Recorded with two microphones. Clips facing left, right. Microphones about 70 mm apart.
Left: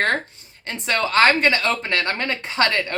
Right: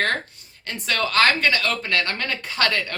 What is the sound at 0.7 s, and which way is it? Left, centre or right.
Speech, left.